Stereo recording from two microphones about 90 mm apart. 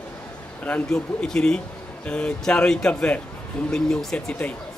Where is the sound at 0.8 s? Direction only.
5° left (ahead or behind).